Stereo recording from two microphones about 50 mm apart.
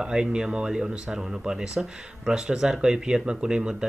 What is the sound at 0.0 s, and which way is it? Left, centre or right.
Speech, centre.